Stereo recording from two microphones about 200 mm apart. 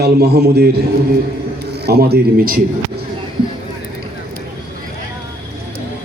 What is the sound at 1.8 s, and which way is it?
Speech, 50° right (ahead or behind).